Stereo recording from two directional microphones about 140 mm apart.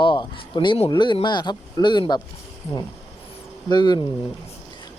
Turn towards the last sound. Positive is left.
turn(degrees=30)  # may be behind; listen again after turning